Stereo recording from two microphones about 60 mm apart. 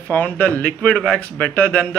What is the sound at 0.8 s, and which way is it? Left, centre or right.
A man's voice, centre.